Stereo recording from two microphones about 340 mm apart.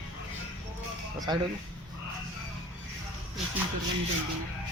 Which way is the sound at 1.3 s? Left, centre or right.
Centre.